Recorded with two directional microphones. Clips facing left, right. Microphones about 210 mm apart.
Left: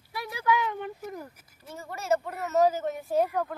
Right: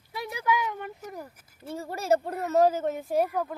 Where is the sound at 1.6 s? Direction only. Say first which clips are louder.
Right 5 dB; 30° right (ahead or behind).